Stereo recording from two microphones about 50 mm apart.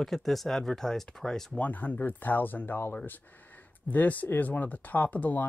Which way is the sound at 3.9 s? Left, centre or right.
Left.